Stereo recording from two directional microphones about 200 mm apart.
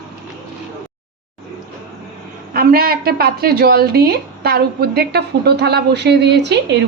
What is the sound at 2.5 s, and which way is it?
A woman's voice, 50° right (ahead or behind).